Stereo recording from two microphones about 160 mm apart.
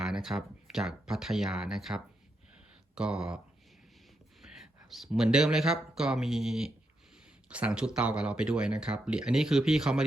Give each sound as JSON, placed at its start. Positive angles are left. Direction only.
{"t": 0.0, "sound": "speech", "side_deg": 0}
{"t": 4.4, "sound": "speech", "side_deg": 0}